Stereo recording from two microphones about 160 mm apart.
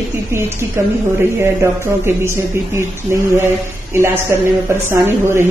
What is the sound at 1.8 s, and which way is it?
Speech, 15° right (ahead or behind).